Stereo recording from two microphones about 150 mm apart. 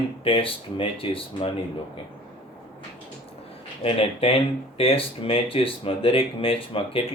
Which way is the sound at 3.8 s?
40° left (ahead or behind).